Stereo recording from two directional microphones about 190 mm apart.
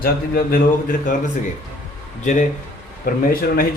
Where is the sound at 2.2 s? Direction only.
40° left (ahead or behind).